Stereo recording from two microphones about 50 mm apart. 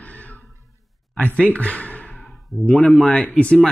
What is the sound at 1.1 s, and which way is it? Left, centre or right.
Speech, left.